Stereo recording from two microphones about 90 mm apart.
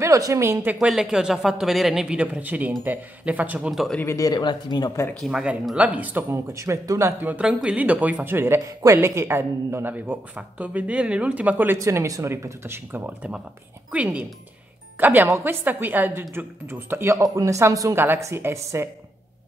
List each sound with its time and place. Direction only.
0.0 s speech: 35° right (ahead or behind)
0.7 s speech: 5° right (ahead or behind)
4.0 s speech: 30° left (ahead or behind)
4.3 s speech: 55° left (ahead or behind)
5.3 s speech: 10° right (ahead or behind)
6.3 s a woman's voice: 30° right (ahead or behind)
8.5 s a woman's voice: 35° right (ahead or behind); by 11.8 s 20° right (ahead or behind)
11.8 s a woman's voice: 35° right (ahead or behind)
17.9 s a woman's voice: 25° right (ahead or behind)